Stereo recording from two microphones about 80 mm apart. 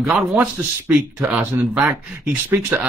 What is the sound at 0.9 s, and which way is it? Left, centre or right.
Speech, right.